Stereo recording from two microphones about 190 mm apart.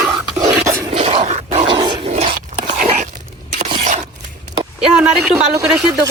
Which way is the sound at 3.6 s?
40° right (ahead or behind).